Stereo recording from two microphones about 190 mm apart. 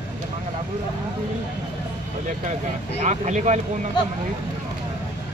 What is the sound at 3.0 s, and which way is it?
Speech, 40° right (ahead or behind).